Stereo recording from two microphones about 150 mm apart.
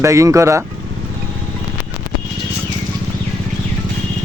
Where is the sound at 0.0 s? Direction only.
20° right (ahead or behind).